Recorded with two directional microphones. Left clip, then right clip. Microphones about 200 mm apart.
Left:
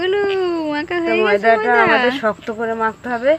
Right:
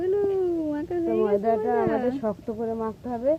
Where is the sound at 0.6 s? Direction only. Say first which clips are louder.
Left 7 dB; 35° left (ahead or behind).